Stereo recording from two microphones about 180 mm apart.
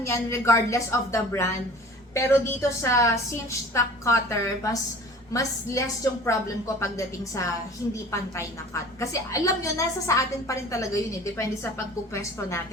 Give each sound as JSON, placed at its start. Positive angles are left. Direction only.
{"t": 0.0, "sound": "a woman's voice", "side_deg": 15}